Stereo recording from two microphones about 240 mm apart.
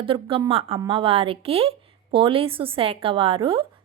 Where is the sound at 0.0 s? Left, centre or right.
Right.